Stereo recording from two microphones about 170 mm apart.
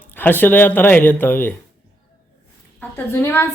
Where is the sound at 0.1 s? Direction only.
10° left (ahead or behind).